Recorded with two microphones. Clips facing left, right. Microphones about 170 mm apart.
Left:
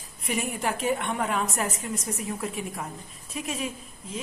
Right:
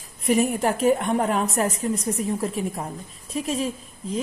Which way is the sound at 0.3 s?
40° right (ahead or behind).